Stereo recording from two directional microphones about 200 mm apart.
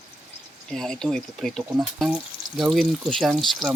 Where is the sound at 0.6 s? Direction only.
5° left (ahead or behind).